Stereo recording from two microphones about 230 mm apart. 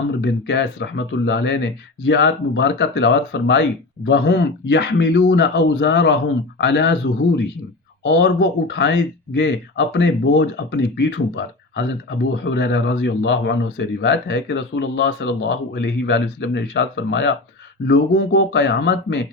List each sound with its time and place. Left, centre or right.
0.2 s speech: left